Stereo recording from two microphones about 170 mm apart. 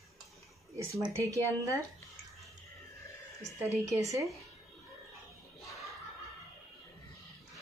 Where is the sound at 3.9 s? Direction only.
20° right (ahead or behind).